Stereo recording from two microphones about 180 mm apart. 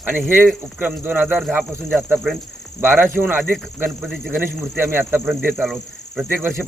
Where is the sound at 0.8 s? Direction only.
10° right (ahead or behind).